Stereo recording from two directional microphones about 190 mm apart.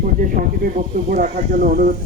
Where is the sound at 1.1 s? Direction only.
45° right (ahead or behind).